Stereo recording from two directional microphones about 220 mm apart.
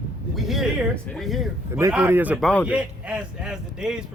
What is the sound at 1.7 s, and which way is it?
A man's voice, 15° right (ahead or behind).